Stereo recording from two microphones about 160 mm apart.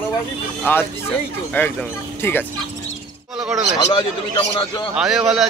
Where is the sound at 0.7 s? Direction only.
15° left (ahead or behind).